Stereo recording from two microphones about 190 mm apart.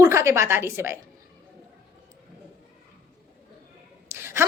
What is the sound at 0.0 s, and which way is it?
Speech, 15° right (ahead or behind).